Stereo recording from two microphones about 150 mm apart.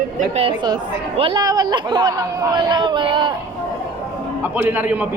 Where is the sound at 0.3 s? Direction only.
35° right (ahead or behind).